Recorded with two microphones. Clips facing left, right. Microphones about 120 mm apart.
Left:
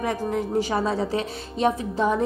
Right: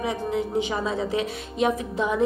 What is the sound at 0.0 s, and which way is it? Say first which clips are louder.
Speech: left 1 dB; 45° left (ahead or behind).